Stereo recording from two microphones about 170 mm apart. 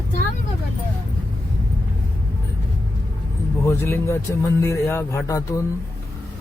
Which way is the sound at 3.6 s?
15° left (ahead or behind).